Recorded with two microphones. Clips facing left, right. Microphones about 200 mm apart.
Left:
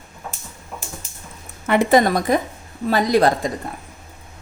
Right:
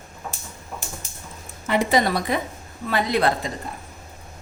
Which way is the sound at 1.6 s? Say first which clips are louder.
Left 5 dB; 60° left (ahead or behind).